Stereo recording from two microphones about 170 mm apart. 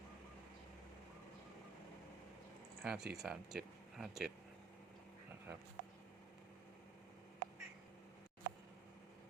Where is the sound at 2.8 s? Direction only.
5° right (ahead or behind).